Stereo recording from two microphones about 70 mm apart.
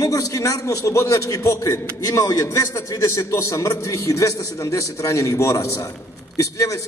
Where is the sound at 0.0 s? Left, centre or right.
Left.